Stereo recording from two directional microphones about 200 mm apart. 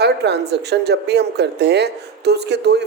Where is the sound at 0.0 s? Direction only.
55° right (ahead or behind).